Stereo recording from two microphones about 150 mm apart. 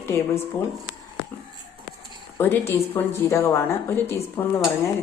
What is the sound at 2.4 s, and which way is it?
A woman's voice, 15° left (ahead or behind).